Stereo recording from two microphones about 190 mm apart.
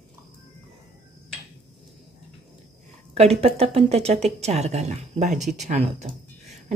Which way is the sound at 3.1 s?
35° right (ahead or behind).